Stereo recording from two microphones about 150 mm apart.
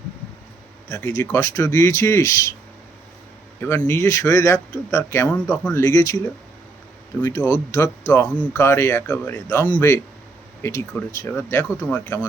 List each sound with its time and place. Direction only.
0.9 s speech: 20° left (ahead or behind)
3.6 s speech: 15° left (ahead or behind)